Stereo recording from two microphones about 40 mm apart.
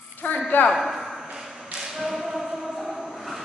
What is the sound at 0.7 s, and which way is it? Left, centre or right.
Speech, centre.